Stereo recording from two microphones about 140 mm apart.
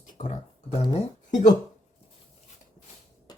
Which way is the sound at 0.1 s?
60° left (ahead or behind).